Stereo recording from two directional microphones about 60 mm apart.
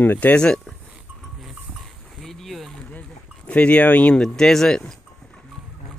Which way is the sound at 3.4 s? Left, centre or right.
Left.